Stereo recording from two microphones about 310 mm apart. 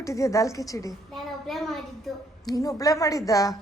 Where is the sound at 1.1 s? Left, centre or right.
Centre.